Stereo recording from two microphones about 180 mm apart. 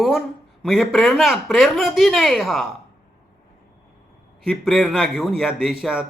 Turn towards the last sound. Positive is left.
turn(degrees=-5)  # may be behind; listen again after turning